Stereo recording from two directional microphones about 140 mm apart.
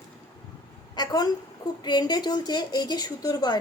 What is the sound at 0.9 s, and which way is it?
A woman's voice, 30° left (ahead or behind).